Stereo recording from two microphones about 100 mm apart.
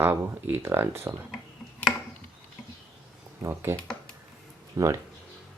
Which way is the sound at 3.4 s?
25° right (ahead or behind).